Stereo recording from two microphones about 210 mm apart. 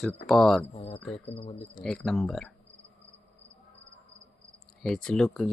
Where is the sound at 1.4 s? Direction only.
30° left (ahead or behind).